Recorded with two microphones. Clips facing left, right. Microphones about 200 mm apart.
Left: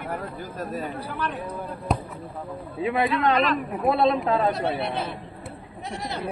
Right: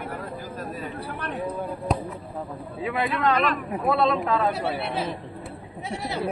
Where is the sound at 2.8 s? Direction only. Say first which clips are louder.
Left 2 dB; 25° left (ahead or behind).